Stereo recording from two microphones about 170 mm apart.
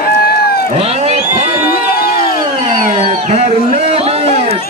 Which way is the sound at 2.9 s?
40° right (ahead or behind).